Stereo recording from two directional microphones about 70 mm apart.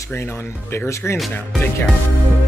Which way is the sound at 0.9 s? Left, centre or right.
Left.